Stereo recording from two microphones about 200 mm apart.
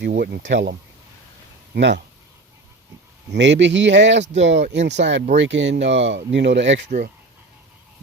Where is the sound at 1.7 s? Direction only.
60° right (ahead or behind).